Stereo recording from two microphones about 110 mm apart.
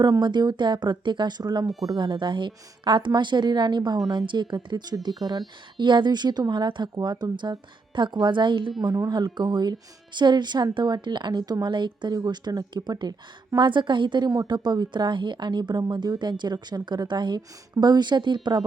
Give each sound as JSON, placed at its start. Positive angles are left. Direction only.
{"t": 0.0, "sound": "a woman's voice", "side_deg": -40}
{"t": 8.8, "sound": "speech", "side_deg": -35}